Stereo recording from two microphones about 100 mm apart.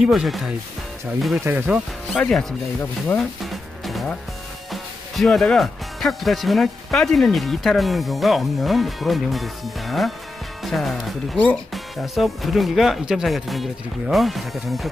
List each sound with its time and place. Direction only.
0.0 s speech: centre (ahead or behind)
1.5 s speech: 20° right (ahead or behind)
2.1 s speech: 5° left (ahead or behind)
3.4 s music: centre (ahead or behind)
5.1 s speech: centre (ahead or behind)